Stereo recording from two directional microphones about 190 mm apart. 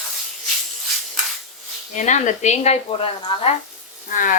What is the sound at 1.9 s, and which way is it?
Speech, 40° left (ahead or behind).